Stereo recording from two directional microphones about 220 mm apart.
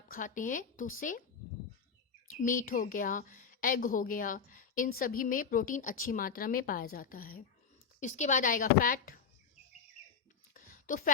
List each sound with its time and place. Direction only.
0.1 s a woman's voice: 35° left (ahead or behind)
2.2 s a woman's voice: 35° left (ahead or behind)
10.5 s a sound: 40° left (ahead or behind)